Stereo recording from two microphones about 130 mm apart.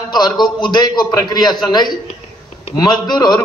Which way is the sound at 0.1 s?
30° left (ahead or behind).